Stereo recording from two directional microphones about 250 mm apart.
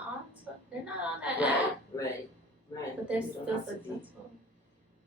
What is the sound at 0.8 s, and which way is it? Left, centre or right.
Speech, centre.